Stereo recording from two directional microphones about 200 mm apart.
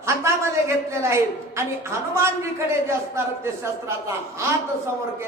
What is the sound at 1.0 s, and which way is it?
A woman's voice, 15° right (ahead or behind).